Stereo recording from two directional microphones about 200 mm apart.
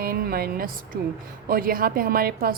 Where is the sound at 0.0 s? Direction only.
45° right (ahead or behind).